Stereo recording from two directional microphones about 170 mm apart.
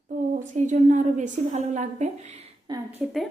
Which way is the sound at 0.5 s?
45° right (ahead or behind).